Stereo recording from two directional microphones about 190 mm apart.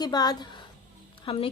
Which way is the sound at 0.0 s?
20° left (ahead or behind).